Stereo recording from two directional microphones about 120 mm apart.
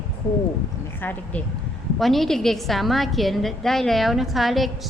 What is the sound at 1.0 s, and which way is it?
Speech, 15° left (ahead or behind).